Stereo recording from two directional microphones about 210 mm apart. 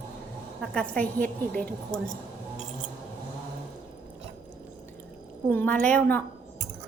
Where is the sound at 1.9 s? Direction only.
65° right (ahead or behind).